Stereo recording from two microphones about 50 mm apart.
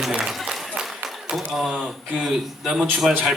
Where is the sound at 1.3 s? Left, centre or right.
Centre.